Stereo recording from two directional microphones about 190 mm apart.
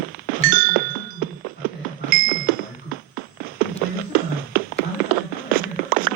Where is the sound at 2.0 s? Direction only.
50° right (ahead or behind).